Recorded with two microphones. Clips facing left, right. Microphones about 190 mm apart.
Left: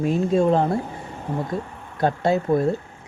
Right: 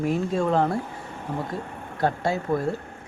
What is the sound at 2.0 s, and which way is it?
Speech, 20° left (ahead or behind).